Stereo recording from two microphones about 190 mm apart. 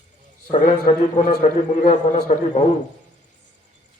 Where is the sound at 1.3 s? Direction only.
45° left (ahead or behind).